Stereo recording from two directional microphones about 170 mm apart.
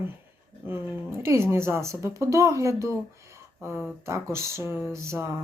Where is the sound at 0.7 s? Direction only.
15° right (ahead or behind).